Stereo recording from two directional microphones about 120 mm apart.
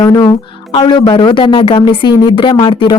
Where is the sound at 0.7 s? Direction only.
40° left (ahead or behind).